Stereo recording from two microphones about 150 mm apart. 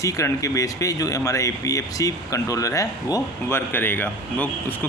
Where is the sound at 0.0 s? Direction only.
20° left (ahead or behind).